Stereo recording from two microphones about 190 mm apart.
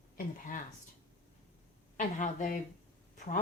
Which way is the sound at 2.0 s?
40° left (ahead or behind).